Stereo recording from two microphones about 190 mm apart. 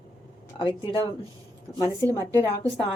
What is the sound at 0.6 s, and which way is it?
A woman's voice, 25° left (ahead or behind).